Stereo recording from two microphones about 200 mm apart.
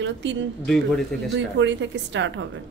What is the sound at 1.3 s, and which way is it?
A woman's voice, 65° right (ahead or behind).